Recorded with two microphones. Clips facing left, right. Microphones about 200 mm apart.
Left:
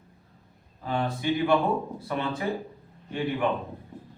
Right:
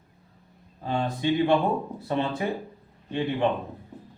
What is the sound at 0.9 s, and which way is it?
A man's voice, 25° right (ahead or behind).